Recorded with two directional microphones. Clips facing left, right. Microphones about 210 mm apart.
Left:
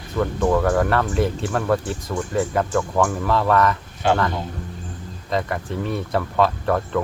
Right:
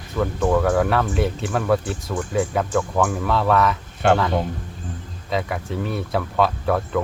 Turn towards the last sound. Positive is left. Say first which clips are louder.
# even
turn(degrees=0)  # may be behind; listen again after turning